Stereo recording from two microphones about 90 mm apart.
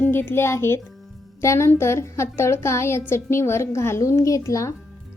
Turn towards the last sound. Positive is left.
turn(degrees=35)  # may be behind; listen again after turning